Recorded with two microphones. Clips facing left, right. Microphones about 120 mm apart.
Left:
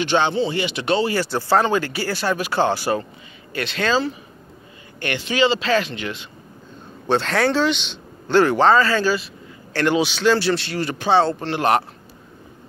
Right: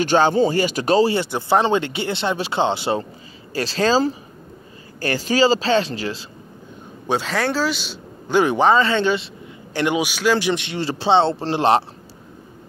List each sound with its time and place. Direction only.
0.0 s speech: 40° right (ahead or behind)
1.1 s speech: 20° right (ahead or behind)
3.5 s speech: 30° right (ahead or behind)
7.1 s speech: 5° right (ahead or behind); by 9.3 s 25° right (ahead or behind)
9.8 s speech: 15° right (ahead or behind)